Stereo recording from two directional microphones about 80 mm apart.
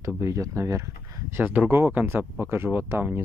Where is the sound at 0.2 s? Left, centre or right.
Right.